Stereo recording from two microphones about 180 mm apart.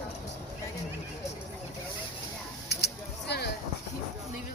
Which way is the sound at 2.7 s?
65° left (ahead or behind).